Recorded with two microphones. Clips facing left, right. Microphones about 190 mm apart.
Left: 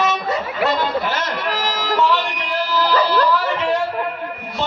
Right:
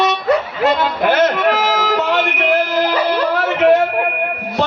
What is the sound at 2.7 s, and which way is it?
Music, 50° right (ahead or behind).